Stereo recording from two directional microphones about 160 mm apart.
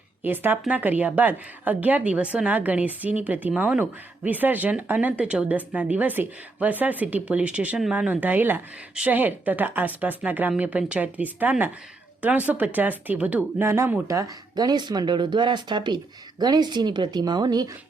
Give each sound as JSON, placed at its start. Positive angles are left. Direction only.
{"t": 0.2, "sound": "a woman's voice", "side_deg": -10}